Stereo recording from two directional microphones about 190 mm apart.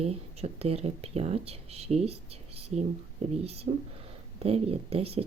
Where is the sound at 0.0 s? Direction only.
35° right (ahead or behind).